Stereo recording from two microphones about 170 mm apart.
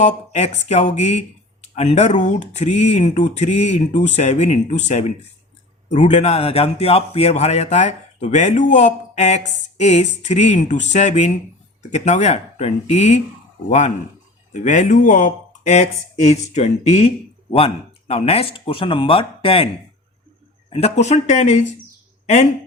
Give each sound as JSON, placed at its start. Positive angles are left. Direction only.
{"t": 0.0, "sound": "speech", "side_deg": 40}
{"t": 18.1, "sound": "speech", "side_deg": 35}